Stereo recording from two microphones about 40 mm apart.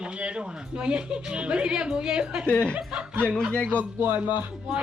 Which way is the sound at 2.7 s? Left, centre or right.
Right.